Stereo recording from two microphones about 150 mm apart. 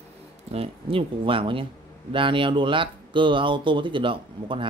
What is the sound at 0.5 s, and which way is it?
Speech, 40° right (ahead or behind).